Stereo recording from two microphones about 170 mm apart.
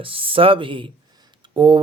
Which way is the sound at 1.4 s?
30° right (ahead or behind).